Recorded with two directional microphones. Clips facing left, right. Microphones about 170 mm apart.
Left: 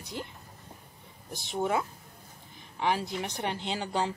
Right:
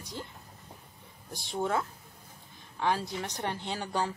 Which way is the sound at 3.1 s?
25° left (ahead or behind).